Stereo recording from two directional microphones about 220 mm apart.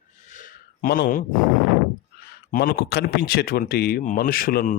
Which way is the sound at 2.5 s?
45° left (ahead or behind).